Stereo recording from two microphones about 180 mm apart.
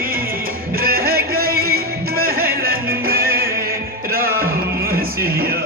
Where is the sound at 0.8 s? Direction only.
60° right (ahead or behind).